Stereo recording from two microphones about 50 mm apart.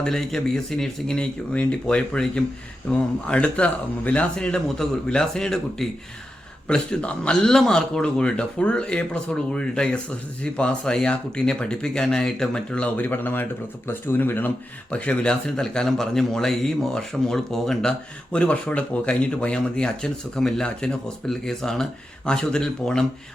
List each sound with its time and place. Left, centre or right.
0.0 s a man's voice: centre; by 4.3 s left
4.4 s a man's voice: centre
13.0 s speech: left
14.8 s a man's voice: left; by 18.3 s centre
18.3 s a man's voice: left